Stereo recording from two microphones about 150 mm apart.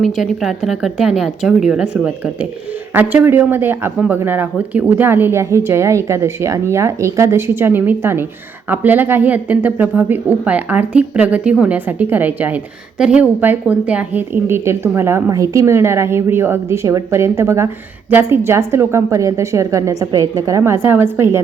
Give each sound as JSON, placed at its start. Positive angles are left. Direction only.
{"t": 0.0, "sound": "a woman's voice", "side_deg": 0}